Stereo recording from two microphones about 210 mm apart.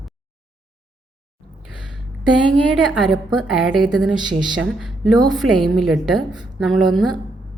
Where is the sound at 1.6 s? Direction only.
5° right (ahead or behind).